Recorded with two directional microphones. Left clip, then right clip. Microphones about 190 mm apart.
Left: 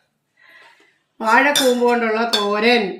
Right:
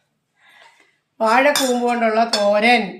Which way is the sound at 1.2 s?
55° right (ahead or behind).